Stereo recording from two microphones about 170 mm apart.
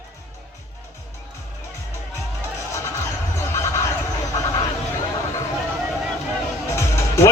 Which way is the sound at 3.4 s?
15° left (ahead or behind).